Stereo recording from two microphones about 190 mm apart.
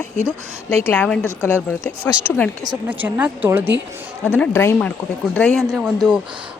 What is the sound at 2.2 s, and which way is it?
Speech, 10° left (ahead or behind).